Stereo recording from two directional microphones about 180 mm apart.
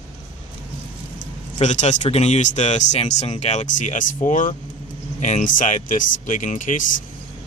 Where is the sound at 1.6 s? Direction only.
40° left (ahead or behind).